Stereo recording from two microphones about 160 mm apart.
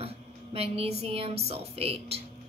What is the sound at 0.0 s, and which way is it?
A woman's voice, 40° right (ahead or behind).